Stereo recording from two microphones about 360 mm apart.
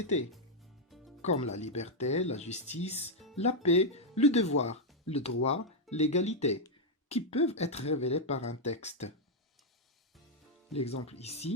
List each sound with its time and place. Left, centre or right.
1.2 s speech: centre
10.7 s speech: centre